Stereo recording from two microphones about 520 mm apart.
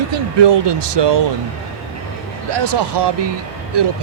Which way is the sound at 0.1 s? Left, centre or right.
Right.